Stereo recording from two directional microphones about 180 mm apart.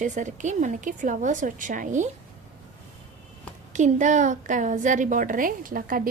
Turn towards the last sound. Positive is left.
turn(degrees=-50)  # may be behind; listen again after turning